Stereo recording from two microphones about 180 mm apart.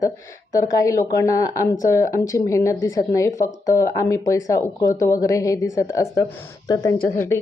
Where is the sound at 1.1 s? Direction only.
20° left (ahead or behind).